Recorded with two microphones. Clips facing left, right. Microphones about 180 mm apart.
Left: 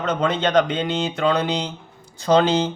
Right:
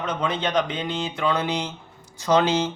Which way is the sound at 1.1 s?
40° left (ahead or behind).